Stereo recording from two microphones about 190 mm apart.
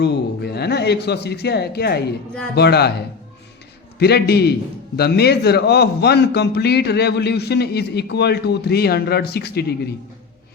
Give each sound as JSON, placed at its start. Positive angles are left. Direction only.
{"t": 0.0, "sound": "a man's voice", "side_deg": 60}
{"t": 3.9, "sound": "a man's voice", "side_deg": 60}